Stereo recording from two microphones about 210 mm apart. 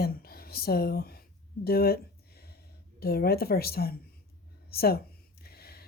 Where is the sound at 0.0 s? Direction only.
45° left (ahead or behind).